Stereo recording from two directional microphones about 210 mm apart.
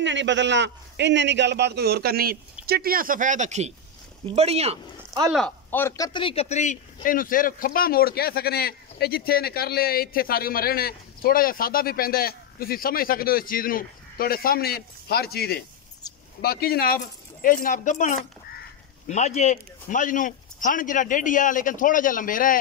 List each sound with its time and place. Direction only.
0.0 s a man's voice: 60° right (ahead or behind); by 5.2 s 30° right (ahead or behind)
5.3 s a man's voice: 5° left (ahead or behind); by 22.6 s 40° left (ahead or behind)